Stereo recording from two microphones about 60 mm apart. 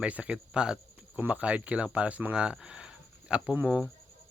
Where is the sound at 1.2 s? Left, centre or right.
Right.